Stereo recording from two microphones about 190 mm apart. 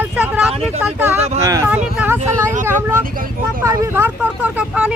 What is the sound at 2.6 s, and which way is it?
Vehicle, 10° right (ahead or behind).